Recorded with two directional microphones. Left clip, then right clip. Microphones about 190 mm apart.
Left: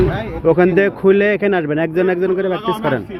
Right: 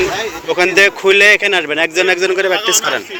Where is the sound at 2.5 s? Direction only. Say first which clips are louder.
Right 6 dB; 60° left (ahead or behind).